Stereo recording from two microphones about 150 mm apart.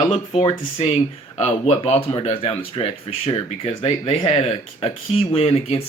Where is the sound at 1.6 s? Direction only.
45° left (ahead or behind).